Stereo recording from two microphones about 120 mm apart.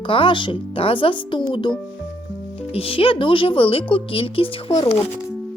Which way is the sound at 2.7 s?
50° left (ahead or behind).